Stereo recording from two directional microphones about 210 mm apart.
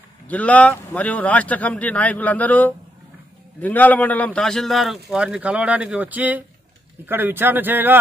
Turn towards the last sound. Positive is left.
turn(degrees=-10)  # may be behind; listen again after turning